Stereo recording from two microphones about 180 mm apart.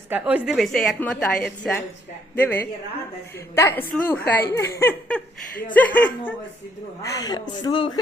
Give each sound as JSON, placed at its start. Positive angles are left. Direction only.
{"t": 0.1, "sound": "a woman's voice", "side_deg": -5}